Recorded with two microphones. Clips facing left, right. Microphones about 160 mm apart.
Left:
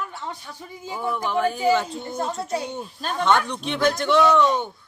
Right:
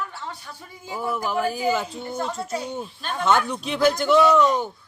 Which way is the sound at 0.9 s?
5° right (ahead or behind).